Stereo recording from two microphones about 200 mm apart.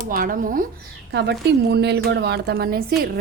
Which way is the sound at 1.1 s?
55° right (ahead or behind).